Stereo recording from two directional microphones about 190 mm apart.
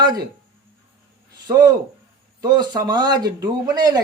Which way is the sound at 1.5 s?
20° right (ahead or behind).